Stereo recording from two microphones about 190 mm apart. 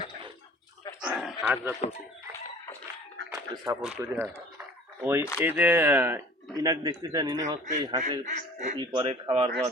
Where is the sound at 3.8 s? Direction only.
5° right (ahead or behind).